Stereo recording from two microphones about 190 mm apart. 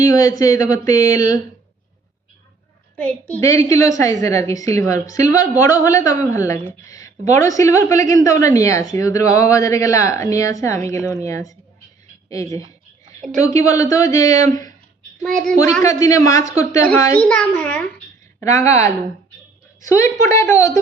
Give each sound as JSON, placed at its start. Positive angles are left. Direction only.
{"t": 0.0, "sound": "a woman's voice", "side_deg": 20}
{"t": 3.0, "sound": "a woman's voice", "side_deg": 10}
{"t": 15.2, "sound": "child singing", "side_deg": 5}
{"t": 15.5, "sound": "a woman's voice", "side_deg": 15}
{"t": 16.9, "sound": "a woman's voice", "side_deg": 5}
{"t": 18.3, "sound": "a woman's voice", "side_deg": 15}